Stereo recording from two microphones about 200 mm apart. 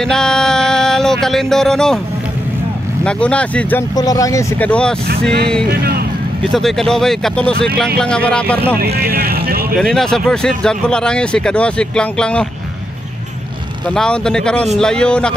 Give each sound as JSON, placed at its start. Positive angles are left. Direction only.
{"t": 0.0, "sound": "music", "side_deg": 5}
{"t": 3.0, "sound": "speech", "side_deg": 5}
{"t": 3.9, "sound": "speech", "side_deg": 15}
{"t": 5.7, "sound": "speech", "side_deg": -50}
{"t": 6.5, "sound": "speech", "side_deg": 0}
{"t": 8.8, "sound": "vehicle", "side_deg": -50}
{"t": 9.8, "sound": "speech", "side_deg": 5}
{"t": 13.8, "sound": "speech", "side_deg": 5}